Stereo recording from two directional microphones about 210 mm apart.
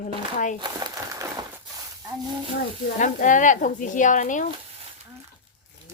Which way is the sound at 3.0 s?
40° left (ahead or behind).